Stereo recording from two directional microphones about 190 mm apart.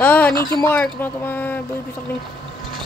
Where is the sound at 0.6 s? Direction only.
10° left (ahead or behind).